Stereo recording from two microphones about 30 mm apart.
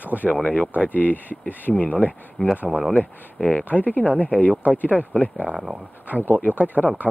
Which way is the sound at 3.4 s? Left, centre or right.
Left.